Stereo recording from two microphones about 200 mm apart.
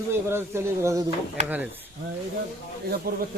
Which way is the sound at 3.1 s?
50° right (ahead or behind).